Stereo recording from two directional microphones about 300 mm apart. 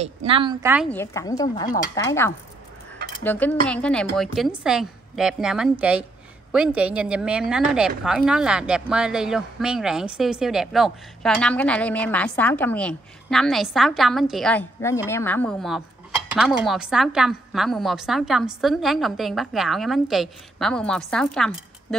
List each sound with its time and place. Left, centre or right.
0.0 s speech: centre
0.8 s speech: centre